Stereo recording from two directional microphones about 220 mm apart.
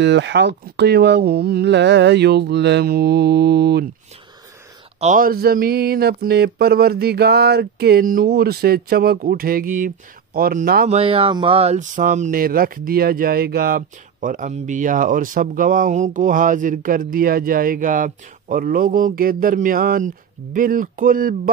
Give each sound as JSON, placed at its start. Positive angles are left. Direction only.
{"t": 0.0, "sound": "speech", "side_deg": -55}
{"t": 5.0, "sound": "speech", "side_deg": -40}
{"t": 11.0, "sound": "speech", "side_deg": -25}